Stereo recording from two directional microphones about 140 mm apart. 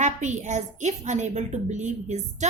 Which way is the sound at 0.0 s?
60° right (ahead or behind).